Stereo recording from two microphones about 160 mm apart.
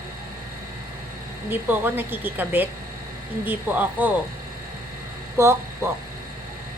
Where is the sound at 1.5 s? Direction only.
10° right (ahead or behind).